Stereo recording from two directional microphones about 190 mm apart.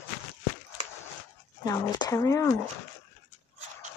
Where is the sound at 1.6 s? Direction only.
20° left (ahead or behind).